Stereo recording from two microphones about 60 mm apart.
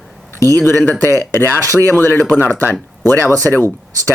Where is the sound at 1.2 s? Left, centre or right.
Left.